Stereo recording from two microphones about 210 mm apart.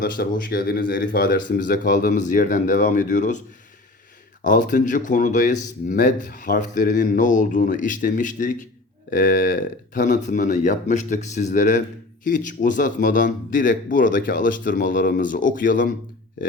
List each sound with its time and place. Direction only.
0.0 s speech: 45° left (ahead or behind)
4.4 s speech: 40° left (ahead or behind)